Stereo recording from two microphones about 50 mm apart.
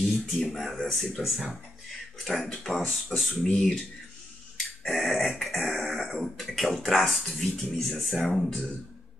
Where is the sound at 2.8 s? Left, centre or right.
Left.